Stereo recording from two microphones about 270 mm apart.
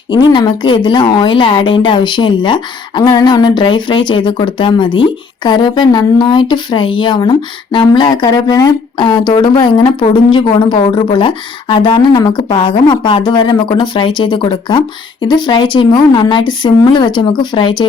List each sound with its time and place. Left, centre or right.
0.1 s speech: centre